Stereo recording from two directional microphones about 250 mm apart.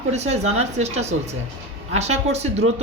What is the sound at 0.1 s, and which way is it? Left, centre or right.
Speech, right.